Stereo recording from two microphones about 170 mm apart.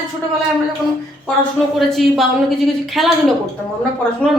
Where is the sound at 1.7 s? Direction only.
Centre (ahead or behind).